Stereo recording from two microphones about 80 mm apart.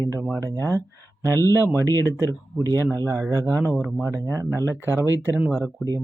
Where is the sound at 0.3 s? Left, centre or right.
Right.